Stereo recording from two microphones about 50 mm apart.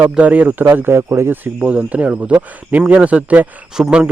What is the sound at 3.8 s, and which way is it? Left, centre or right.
Speech, centre.